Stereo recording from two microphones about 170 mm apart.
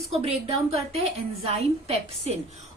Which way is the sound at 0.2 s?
35° right (ahead or behind).